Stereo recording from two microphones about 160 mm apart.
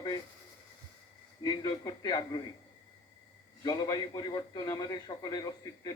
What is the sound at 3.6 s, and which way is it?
A man's voice, 25° left (ahead or behind).